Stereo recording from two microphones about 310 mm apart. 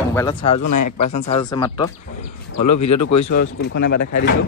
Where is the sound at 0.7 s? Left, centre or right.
Left.